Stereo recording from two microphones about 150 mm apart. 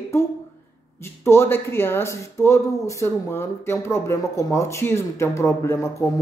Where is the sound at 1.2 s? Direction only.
15° left (ahead or behind).